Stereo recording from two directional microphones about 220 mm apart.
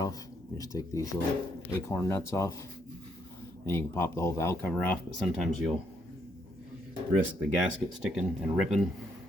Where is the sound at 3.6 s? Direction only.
10° left (ahead or behind).